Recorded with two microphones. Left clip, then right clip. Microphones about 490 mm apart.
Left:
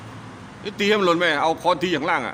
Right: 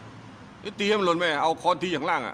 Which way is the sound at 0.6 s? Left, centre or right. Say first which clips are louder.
Left 5 dB; right.